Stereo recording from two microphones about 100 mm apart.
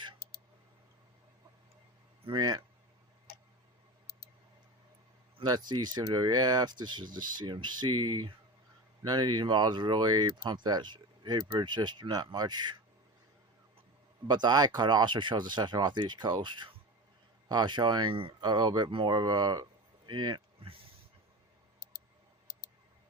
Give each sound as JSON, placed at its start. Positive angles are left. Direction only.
{"t": 2.3, "sound": "speech", "side_deg": -45}
{"t": 5.4, "sound": "speech", "side_deg": -40}
{"t": 14.3, "sound": "speech", "side_deg": -45}
{"t": 18.9, "sound": "speech", "side_deg": -55}